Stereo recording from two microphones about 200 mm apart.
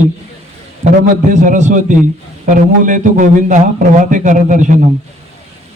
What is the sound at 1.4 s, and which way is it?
A man's voice, 40° right (ahead or behind).